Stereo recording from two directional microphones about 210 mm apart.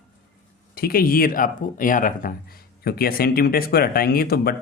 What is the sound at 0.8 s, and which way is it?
Speech, 45° left (ahead or behind).